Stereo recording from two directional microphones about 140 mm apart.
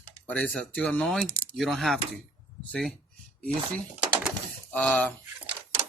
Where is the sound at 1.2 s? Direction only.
20° right (ahead or behind).